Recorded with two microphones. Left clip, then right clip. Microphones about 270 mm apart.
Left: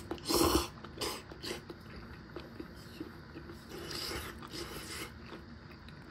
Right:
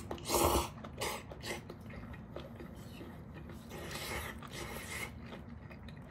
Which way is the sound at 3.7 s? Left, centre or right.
Left.